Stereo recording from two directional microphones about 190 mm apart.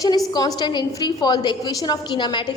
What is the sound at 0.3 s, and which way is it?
A woman's voice, 20° left (ahead or behind).